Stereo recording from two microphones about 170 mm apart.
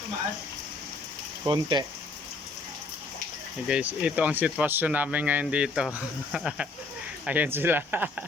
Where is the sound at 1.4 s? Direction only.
25° right (ahead or behind).